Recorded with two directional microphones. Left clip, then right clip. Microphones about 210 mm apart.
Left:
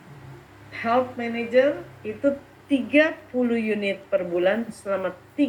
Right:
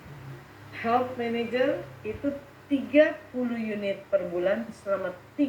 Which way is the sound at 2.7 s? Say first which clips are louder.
Left 2 dB; 45° left (ahead or behind).